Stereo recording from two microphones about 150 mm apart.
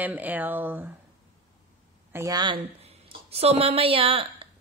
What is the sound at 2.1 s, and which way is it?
A woman's voice, 25° right (ahead or behind).